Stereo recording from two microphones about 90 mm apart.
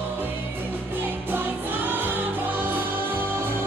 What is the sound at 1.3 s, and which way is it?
Music, 20° right (ahead or behind).